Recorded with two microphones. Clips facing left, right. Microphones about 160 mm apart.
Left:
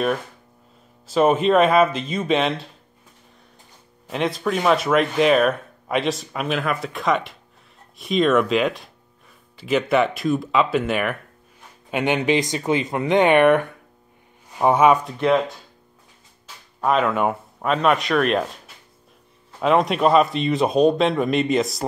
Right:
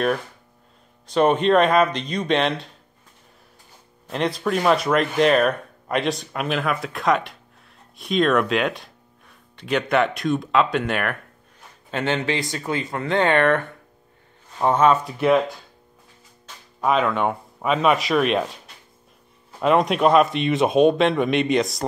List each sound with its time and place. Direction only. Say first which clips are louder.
1.0 s speech: left 1 dB; 5° left (ahead or behind)
4.1 s speech: even; centre (ahead or behind)
11.9 s speech: left 4 dB; 15° left (ahead or behind)
15.0 s speech: right 1 dB; 5° right (ahead or behind)
16.8 s speech: left 1 dB; centre (ahead or behind)
19.6 s speech: even; centre (ahead or behind)